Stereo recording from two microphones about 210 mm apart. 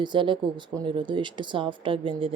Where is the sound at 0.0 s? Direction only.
20° right (ahead or behind).